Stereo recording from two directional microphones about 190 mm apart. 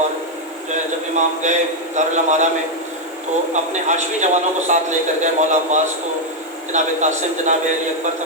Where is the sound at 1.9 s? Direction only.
40° right (ahead or behind).